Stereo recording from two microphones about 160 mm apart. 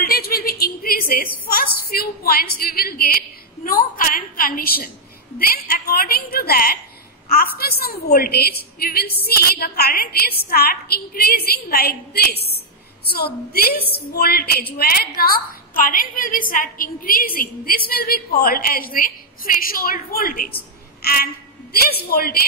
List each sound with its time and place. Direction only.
0.0 s a woman's voice: 70° left (ahead or behind)